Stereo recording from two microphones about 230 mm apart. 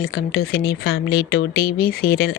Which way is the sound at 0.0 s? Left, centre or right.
Left.